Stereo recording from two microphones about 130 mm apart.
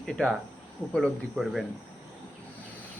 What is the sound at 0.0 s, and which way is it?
A man's voice, 5° left (ahead or behind).